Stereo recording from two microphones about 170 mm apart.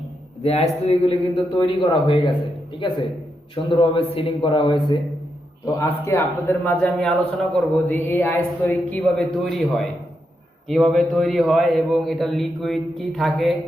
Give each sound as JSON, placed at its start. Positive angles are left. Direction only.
{"t": 0.4, "sound": "a man's voice", "side_deg": 40}
{"t": 3.5, "sound": "a man's voice", "side_deg": 30}
{"t": 5.6, "sound": "a man's voice", "side_deg": 20}